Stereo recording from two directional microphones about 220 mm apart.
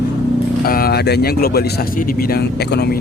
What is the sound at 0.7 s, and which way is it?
Speech, 45° left (ahead or behind).